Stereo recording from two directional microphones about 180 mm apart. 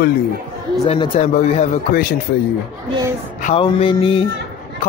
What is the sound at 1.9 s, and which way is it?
Speech, 55° left (ahead or behind).